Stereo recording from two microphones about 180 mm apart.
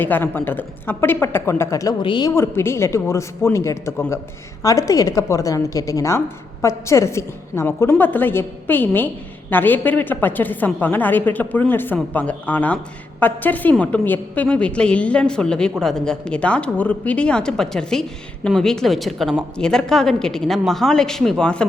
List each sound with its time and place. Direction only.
0.0 s a woman's voice: 10° left (ahead or behind)